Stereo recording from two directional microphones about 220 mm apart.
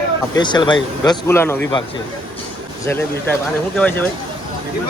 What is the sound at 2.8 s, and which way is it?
Speech, 10° left (ahead or behind).